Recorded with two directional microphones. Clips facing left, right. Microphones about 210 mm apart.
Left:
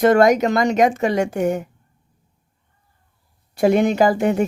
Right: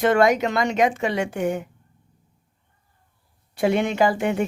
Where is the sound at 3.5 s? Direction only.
40° left (ahead or behind).